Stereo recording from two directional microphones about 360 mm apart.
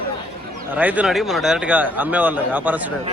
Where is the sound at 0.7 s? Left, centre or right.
Centre.